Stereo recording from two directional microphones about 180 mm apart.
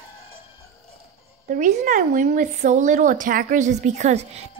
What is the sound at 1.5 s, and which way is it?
Speech, 45° right (ahead or behind).